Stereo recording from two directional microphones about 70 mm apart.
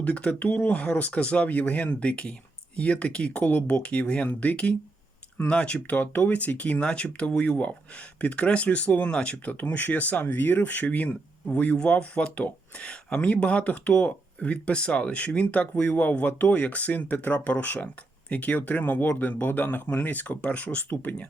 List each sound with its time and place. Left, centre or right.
0.0 s speech: centre